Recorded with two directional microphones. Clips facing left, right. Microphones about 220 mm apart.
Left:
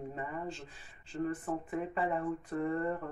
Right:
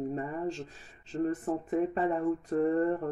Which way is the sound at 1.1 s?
40° right (ahead or behind).